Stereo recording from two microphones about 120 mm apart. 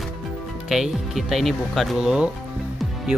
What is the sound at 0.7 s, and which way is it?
Speech, 5° right (ahead or behind).